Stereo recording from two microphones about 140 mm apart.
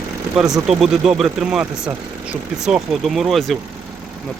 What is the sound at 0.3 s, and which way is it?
Speech, 5° right (ahead or behind).